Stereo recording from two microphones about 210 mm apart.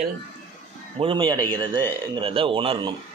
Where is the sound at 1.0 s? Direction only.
25° right (ahead or behind).